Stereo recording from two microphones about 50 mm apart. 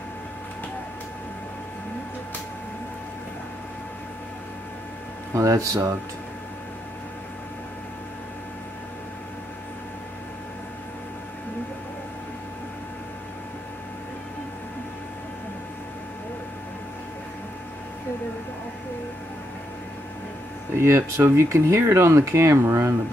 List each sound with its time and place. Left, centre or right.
5.3 s speech: right
20.7 s speech: right